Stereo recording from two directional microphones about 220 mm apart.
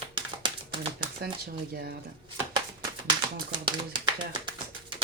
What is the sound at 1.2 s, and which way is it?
Speech, 45° right (ahead or behind).